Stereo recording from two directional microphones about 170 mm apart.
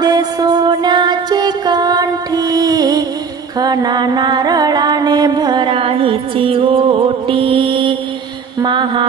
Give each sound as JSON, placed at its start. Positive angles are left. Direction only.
{"t": 0.0, "sound": "music", "side_deg": -25}
{"t": 8.5, "sound": "mantra", "side_deg": -25}